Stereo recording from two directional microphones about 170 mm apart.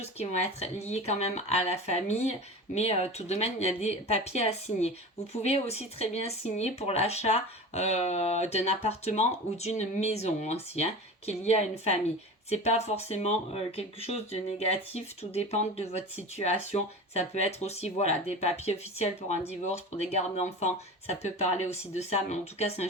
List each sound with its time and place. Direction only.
0.0 s speech: 40° left (ahead or behind)